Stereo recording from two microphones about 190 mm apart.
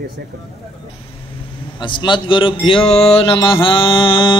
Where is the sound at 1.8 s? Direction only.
25° left (ahead or behind).